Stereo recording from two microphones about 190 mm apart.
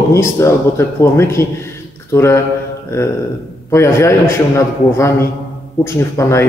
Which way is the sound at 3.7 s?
15° left (ahead or behind).